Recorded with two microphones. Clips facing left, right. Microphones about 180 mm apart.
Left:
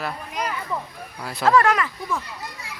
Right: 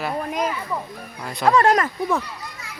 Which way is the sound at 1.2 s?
5° left (ahead or behind).